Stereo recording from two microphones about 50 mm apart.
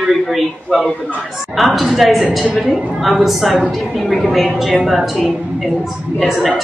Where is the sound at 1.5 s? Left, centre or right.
Centre.